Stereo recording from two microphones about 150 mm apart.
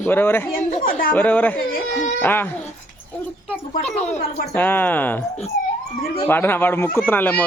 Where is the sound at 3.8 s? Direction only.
50° left (ahead or behind).